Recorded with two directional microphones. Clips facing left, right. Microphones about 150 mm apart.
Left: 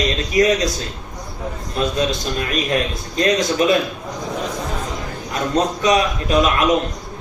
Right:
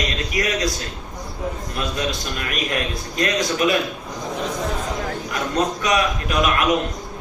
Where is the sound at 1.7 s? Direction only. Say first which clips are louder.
Left 8 dB; 25° left (ahead or behind).